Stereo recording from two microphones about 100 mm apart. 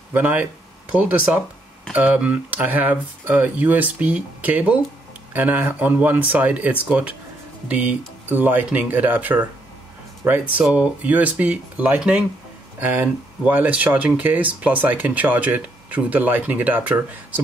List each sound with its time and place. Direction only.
0.1 s speech: 20° right (ahead or behind)